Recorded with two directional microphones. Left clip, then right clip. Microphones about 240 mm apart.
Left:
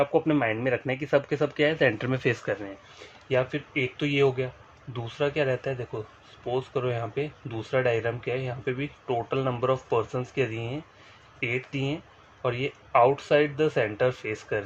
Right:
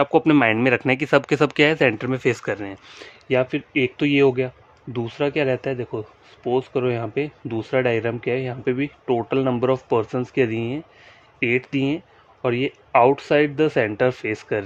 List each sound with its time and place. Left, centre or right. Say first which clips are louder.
0.0 s speech: right 7 dB; right
3.2 s speech: right 5 dB; right